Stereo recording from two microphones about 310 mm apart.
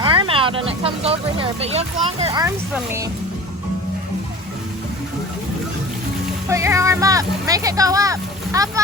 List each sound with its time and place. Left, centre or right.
0.0 s speech: centre
6.5 s speech: centre